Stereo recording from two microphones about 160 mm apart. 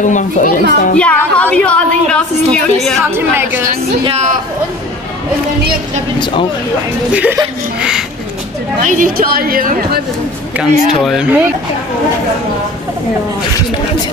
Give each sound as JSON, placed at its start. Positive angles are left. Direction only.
{"t": 0.0, "sound": "a child's voice", "side_deg": 50}
{"t": 0.9, "sound": "a woman's voice", "side_deg": 5}
{"t": 3.2, "sound": "a woman's voice", "side_deg": -15}
{"t": 4.0, "sound": "a man's voice", "side_deg": -45}
{"t": 7.1, "sound": "a woman's voice", "side_deg": -10}
{"t": 8.8, "sound": "a woman's voice", "side_deg": -55}
{"t": 10.6, "sound": "speech", "side_deg": 0}